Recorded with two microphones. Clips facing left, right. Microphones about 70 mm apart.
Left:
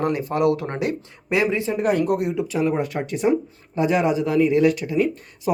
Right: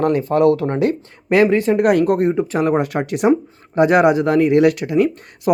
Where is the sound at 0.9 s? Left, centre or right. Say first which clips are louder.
Right 6 dB; right.